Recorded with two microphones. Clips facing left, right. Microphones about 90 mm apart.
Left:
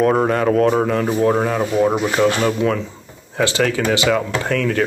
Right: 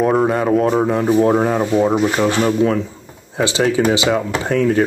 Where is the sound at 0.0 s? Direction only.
5° right (ahead or behind).